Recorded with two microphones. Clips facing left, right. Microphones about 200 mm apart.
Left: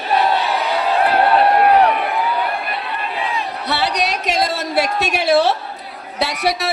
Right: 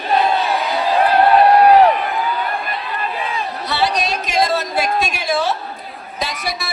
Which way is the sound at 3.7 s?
65° left (ahead or behind).